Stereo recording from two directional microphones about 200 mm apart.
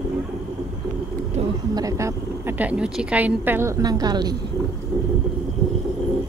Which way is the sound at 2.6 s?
5° right (ahead or behind).